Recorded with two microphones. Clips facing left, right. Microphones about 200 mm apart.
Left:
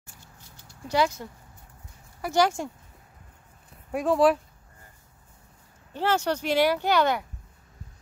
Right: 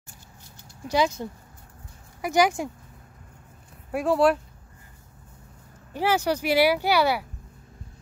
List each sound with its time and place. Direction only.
0.8 s speech: 15° right (ahead or behind)
2.2 s speech: 15° right (ahead or behind)
3.9 s speech: centre (ahead or behind)
5.9 s speech: 10° right (ahead or behind)